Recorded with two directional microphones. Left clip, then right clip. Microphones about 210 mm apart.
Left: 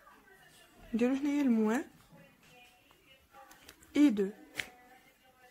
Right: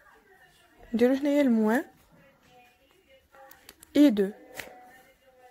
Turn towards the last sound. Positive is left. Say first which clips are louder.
# right 6 dB
turn(degrees=-30)  # may be behind; listen again after turning